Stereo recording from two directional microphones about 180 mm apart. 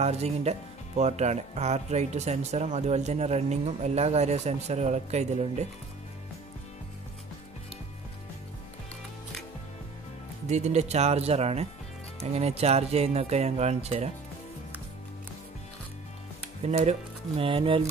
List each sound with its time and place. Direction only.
0.0 s speech: 35° right (ahead or behind)
10.5 s speech: 40° right (ahead or behind)
16.6 s speech: 35° right (ahead or behind)